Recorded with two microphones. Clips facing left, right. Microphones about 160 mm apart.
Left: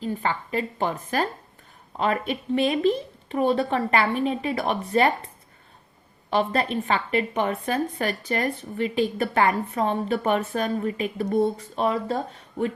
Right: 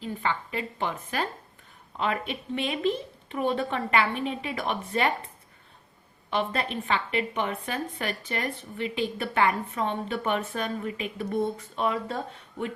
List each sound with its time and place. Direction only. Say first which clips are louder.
0.0 s a woman's voice: left 3 dB; 40° left (ahead or behind)
6.3 s a woman's voice: left 5 dB; 40° left (ahead or behind)